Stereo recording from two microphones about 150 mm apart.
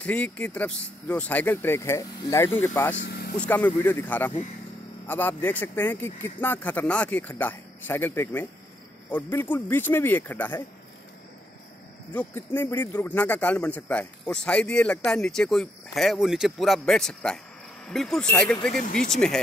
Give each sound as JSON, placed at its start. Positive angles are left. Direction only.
{"t": 0.0, "sound": "a man's voice", "side_deg": 10}
{"t": 3.1, "sound": "vehicle", "side_deg": 90}
{"t": 3.3, "sound": "a man's voice", "side_deg": 10}
{"t": 12.1, "sound": "a man's voice", "side_deg": 10}